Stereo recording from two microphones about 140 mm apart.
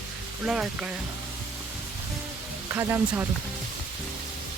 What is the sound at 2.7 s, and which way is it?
Speech, 20° right (ahead or behind).